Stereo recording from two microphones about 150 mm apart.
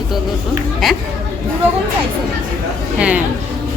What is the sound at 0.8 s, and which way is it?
Speech, centre (ahead or behind).